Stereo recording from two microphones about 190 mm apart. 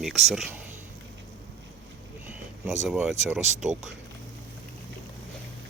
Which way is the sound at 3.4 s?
35° right (ahead or behind).